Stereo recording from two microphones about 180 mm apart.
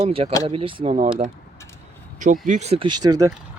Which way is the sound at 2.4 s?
40° right (ahead or behind).